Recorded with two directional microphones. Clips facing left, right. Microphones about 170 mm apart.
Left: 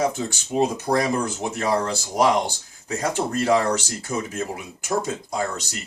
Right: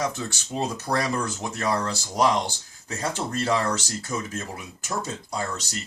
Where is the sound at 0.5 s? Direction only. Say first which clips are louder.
Left 6 dB; 15° left (ahead or behind).